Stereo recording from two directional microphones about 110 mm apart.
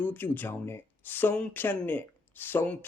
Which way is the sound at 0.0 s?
20° left (ahead or behind).